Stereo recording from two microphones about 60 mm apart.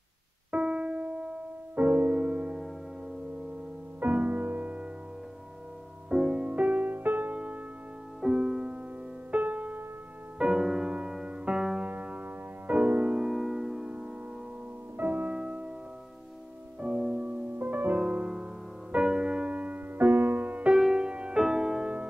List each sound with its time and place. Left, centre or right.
0.5 s music: centre
4.0 s music: right
6.0 s music: centre
8.2 s music: centre
9.3 s music: right
10.4 s music: centre
13.2 s music: centre
15.0 s music: right
15.3 s music: centre
16.8 s music: centre
17.6 s music: right
18.0 s music: centre
20.7 s music: centre